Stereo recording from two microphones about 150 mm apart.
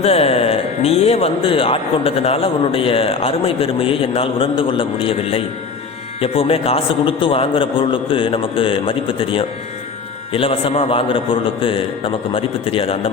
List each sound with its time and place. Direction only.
0.0 s speech: 40° left (ahead or behind)